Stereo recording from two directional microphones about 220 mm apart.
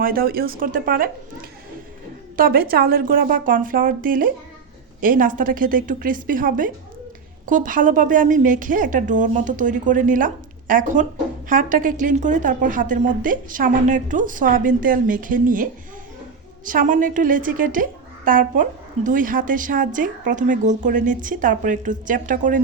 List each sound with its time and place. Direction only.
0.0 s a woman's voice: 40° right (ahead or behind)